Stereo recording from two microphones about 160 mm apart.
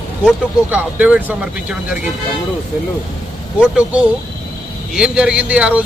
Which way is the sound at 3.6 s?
5° right (ahead or behind).